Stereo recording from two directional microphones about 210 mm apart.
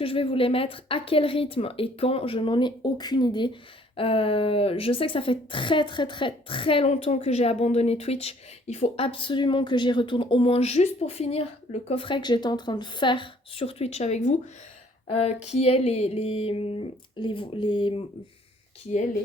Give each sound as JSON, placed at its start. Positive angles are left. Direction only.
{"t": 0.0, "sound": "a woman's voice", "side_deg": 25}